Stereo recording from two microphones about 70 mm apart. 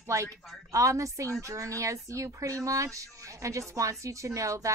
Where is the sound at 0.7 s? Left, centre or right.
Right.